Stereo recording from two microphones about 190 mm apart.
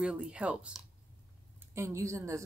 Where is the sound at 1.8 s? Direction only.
15° right (ahead or behind).